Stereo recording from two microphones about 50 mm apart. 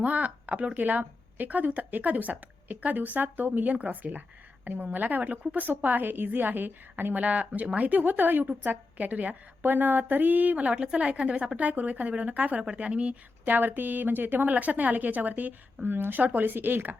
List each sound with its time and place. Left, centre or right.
0.0 s a woman's voice: right
9.6 s a woman's voice: right